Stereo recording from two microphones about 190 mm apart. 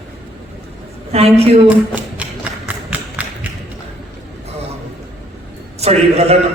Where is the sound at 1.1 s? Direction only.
30° right (ahead or behind).